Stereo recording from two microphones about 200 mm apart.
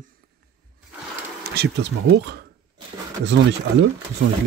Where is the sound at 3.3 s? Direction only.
65° right (ahead or behind).